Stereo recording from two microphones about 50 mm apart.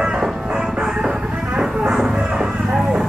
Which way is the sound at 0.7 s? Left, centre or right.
Centre.